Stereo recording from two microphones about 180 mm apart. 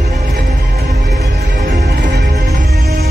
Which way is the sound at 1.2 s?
70° right (ahead or behind).